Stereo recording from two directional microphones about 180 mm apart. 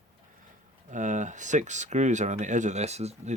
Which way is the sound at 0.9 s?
45° right (ahead or behind).